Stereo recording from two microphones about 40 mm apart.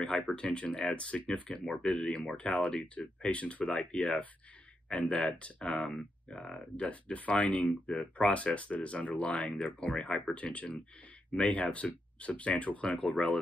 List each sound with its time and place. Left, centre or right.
0.0 s speech: left
6.8 s speech: left